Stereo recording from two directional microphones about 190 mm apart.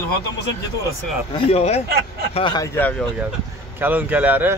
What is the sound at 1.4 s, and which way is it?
Speech, 35° left (ahead or behind).